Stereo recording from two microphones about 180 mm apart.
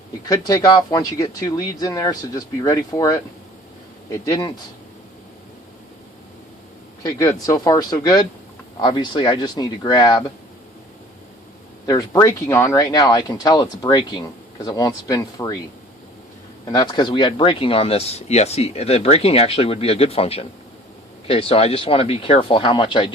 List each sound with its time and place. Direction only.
0.3 s speech: 20° left (ahead or behind)
7.0 s speech: 20° left (ahead or behind)
11.9 s speech: 20° left (ahead or behind)
16.6 s speech: 25° left (ahead or behind)